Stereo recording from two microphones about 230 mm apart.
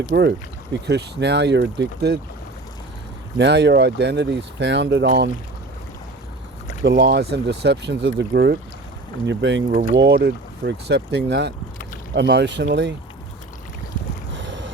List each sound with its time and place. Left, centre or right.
0.1 s speech: right
3.3 s speech: right
6.8 s speech: right